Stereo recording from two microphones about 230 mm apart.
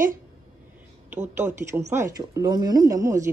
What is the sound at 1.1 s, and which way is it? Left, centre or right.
Speech, centre.